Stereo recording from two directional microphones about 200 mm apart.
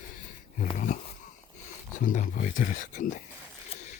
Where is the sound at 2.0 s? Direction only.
40° left (ahead or behind).